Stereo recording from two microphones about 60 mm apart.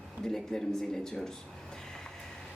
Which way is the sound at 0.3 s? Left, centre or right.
Centre.